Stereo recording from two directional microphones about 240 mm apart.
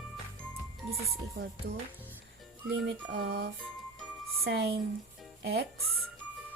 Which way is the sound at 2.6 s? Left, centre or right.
Right.